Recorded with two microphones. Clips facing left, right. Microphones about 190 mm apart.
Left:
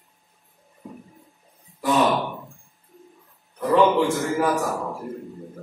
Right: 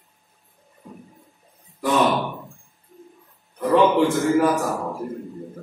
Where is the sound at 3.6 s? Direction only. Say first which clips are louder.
Right 1 dB; centre (ahead or behind).